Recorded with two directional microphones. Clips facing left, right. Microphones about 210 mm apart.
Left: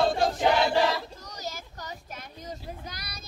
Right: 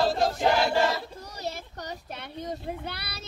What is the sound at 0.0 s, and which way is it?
Choir, centre (ahead or behind).